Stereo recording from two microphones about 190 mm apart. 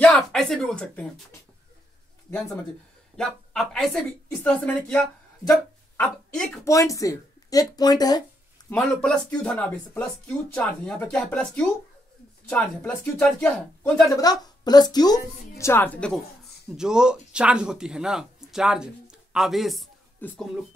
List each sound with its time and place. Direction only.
0.0 s speech: 5° left (ahead or behind)
2.3 s speech: 15° left (ahead or behind)
3.2 s speech: centre (ahead or behind)
6.6 s a woman's voice: 15° left (ahead or behind)
14.2 s a woman's voice: 20° left (ahead or behind)
16.6 s speech: 5° right (ahead or behind)